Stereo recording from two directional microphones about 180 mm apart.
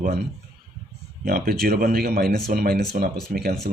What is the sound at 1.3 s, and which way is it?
Speech, 55° right (ahead or behind).